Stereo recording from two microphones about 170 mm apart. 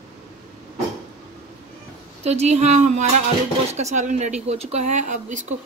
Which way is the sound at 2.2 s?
40° right (ahead or behind).